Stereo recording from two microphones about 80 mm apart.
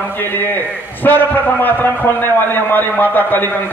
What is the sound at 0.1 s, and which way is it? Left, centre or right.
A man's voice, left.